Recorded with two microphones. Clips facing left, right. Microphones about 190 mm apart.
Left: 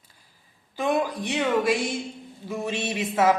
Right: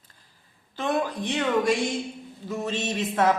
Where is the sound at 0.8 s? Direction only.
10° left (ahead or behind).